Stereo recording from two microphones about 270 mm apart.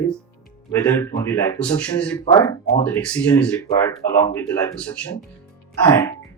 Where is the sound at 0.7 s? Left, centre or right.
Centre.